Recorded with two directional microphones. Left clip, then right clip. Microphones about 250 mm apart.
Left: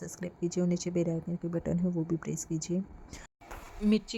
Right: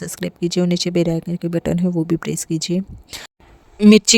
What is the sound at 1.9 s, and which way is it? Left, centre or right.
Speech, right.